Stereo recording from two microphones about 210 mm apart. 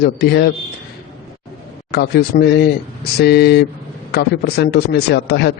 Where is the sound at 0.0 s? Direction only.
50° left (ahead or behind).